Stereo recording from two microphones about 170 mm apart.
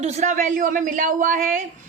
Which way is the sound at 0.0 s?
40° right (ahead or behind).